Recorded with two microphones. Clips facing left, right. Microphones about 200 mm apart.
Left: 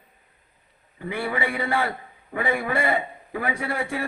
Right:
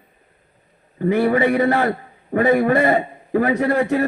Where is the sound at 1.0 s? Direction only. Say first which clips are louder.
Right 11 dB; 45° right (ahead or behind).